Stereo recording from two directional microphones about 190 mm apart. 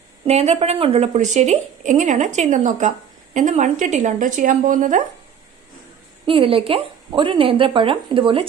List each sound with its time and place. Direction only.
0.3 s a woman's voice: 35° right (ahead or behind)
6.2 s speech: 25° right (ahead or behind)